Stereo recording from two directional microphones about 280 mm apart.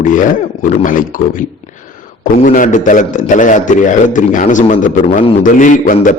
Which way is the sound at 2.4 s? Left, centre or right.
Left.